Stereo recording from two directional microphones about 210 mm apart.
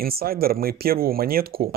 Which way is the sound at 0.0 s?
45° right (ahead or behind).